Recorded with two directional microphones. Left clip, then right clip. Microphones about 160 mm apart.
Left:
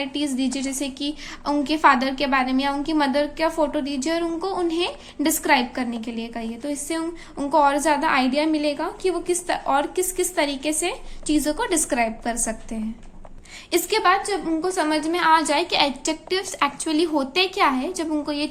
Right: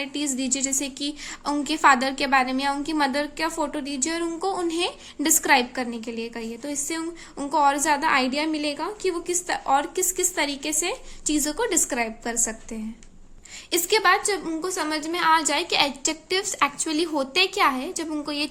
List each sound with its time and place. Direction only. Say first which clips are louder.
0.0 s a woman's voice: left 3 dB; 35° right (ahead or behind)
14.7 s a woman's voice: left 5 dB; 25° right (ahead or behind)